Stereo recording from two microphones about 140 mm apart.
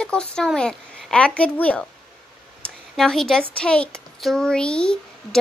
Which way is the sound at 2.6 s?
5° left (ahead or behind).